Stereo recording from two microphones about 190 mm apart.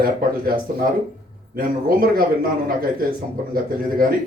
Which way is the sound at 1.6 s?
50° right (ahead or behind).